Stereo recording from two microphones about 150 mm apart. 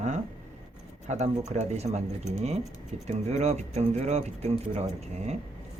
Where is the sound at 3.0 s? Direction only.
45° right (ahead or behind).